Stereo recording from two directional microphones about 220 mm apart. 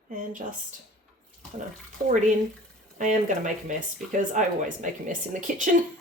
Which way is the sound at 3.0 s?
35° right (ahead or behind).